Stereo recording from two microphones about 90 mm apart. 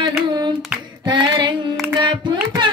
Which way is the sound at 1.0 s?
55° right (ahead or behind).